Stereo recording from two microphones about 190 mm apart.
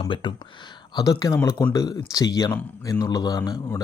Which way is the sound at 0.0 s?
25° left (ahead or behind).